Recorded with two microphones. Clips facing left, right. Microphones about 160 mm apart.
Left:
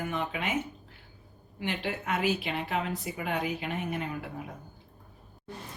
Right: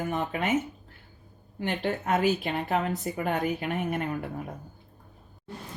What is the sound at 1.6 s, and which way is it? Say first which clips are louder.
Speech: right 4 dB; 45° right (ahead or behind).